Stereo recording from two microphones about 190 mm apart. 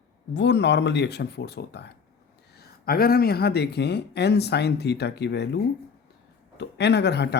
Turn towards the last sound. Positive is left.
turn(degrees=60)  # may be behind; listen again after turning